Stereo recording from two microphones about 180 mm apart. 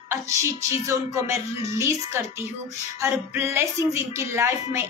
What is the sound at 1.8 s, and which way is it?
Music, 15° right (ahead or behind).